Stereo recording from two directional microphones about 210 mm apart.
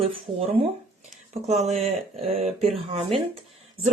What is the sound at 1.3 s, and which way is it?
Speech, 30° right (ahead or behind).